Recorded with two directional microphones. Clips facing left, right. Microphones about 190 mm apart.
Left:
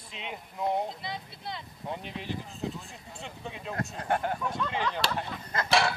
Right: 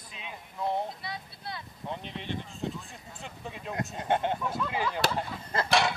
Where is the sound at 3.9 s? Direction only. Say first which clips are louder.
Right 2 dB; 20° right (ahead or behind).